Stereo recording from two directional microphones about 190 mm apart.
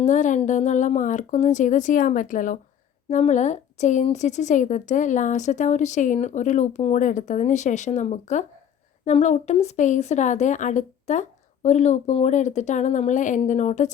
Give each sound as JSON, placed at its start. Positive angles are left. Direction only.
{"t": 0.0, "sound": "a woman's voice", "side_deg": 40}